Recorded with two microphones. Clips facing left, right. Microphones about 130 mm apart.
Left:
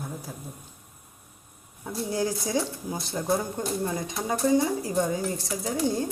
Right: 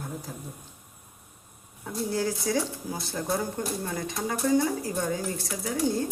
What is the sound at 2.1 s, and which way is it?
Speech, 15° left (ahead or behind).